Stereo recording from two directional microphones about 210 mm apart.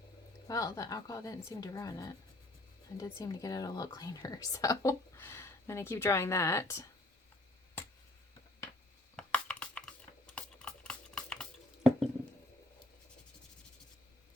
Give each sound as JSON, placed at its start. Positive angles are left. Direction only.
{"t": 0.4, "sound": "a woman's voice", "side_deg": 15}
{"t": 9.1, "sound": "a sound", "side_deg": 5}
{"t": 10.2, "sound": "typing", "side_deg": 5}